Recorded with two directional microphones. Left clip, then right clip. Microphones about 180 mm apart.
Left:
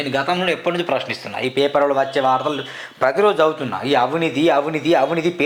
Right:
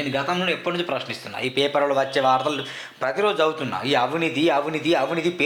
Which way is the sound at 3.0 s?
30° left (ahead or behind).